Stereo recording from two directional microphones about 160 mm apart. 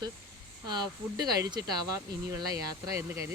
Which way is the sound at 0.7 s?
25° right (ahead or behind).